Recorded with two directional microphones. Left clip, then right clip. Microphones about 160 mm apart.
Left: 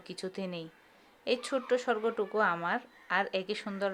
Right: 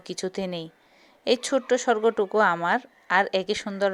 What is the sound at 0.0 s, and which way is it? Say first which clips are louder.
Speech: right 9 dB; 40° right (ahead or behind).